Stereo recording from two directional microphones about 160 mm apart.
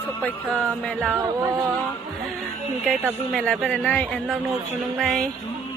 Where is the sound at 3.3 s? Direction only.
5° left (ahead or behind).